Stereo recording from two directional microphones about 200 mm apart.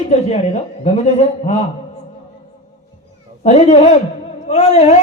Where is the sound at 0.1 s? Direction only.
30° left (ahead or behind).